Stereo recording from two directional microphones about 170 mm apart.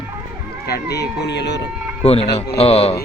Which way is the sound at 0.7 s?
75° left (ahead or behind).